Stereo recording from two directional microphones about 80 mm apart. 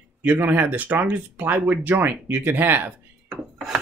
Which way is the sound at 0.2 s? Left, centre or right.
Right.